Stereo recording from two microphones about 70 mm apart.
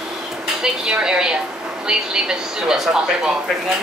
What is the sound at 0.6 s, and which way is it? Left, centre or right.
Speech, centre.